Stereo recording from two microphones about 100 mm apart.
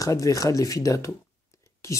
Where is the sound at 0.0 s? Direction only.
35° left (ahead or behind).